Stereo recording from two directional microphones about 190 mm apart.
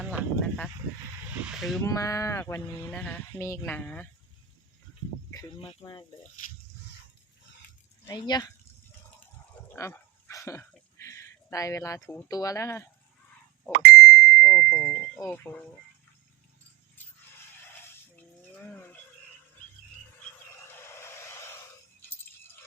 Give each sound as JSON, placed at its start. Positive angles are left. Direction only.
{"t": 0.0, "sound": "speech", "side_deg": -5}
{"t": 1.3, "sound": "a sound", "side_deg": -5}
{"t": 1.8, "sound": "speech", "side_deg": 15}
{"t": 5.5, "sound": "speech", "side_deg": 25}
{"t": 8.0, "sound": "speech", "side_deg": 20}
{"t": 9.7, "sound": "dog", "side_deg": 15}
{"t": 13.9, "sound": "ding", "side_deg": 0}
{"t": 15.2, "sound": "speech", "side_deg": 10}
{"t": 17.0, "sound": "a sound", "side_deg": 10}
{"t": 18.5, "sound": "livestock", "side_deg": 10}
{"t": 20.5, "sound": "a sound", "side_deg": 15}